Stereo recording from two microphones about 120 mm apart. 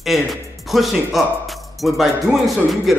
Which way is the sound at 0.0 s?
Centre (ahead or behind).